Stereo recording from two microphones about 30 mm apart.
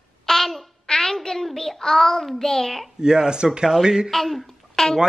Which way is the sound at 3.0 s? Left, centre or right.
Right.